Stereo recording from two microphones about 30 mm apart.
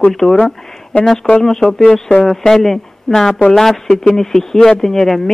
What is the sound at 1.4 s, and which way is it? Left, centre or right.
Speech, centre.